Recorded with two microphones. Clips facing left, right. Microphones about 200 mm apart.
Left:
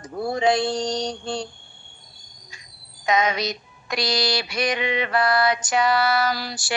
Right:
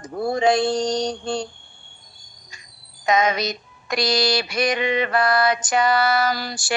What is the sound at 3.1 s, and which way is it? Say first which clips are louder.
Female singing: right 2 dB; 45° right (ahead or behind).